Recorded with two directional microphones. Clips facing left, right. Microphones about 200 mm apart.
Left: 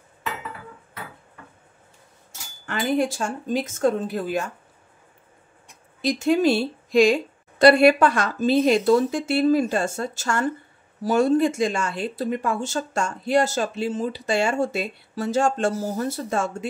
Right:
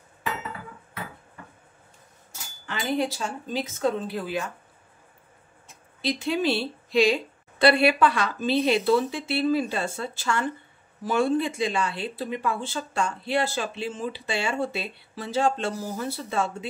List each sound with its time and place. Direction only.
2.6 s speech: 50° left (ahead or behind)
5.9 s speech: 45° left (ahead or behind)